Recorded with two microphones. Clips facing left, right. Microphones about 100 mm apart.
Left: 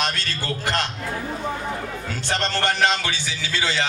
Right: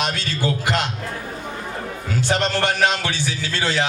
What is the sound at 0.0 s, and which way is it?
Speech, 15° right (ahead or behind).